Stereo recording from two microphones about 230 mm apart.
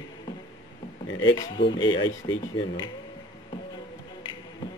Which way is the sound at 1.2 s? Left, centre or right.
Centre.